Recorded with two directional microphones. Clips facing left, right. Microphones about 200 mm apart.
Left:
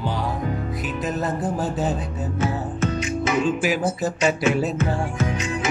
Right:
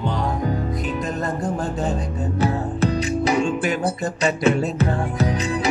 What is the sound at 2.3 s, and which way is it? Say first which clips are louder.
Music: right 3 dB; 35° right (ahead or behind).